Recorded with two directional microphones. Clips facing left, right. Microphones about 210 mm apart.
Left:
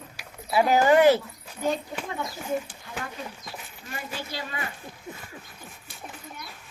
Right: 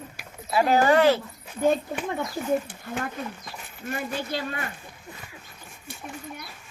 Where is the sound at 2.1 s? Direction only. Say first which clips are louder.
Right 4 dB; 50° right (ahead or behind).